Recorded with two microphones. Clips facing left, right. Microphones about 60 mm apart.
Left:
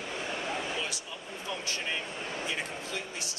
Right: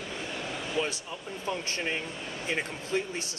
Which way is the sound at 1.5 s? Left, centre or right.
Right.